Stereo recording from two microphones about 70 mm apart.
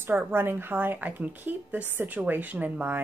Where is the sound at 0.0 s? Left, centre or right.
Right.